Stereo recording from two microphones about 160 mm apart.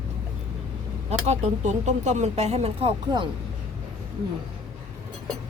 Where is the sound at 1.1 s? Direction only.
45° right (ahead or behind).